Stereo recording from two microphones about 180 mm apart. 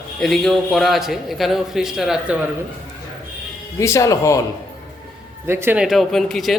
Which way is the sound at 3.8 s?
15° left (ahead or behind).